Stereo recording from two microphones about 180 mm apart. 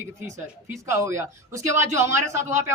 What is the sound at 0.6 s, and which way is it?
Speech, 15° right (ahead or behind).